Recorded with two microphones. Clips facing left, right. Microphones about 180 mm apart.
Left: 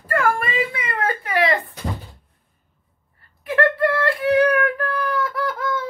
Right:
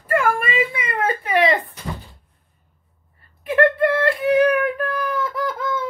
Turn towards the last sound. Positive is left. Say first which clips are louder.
# even
turn(degrees=-20)  # may be behind; listen again after turning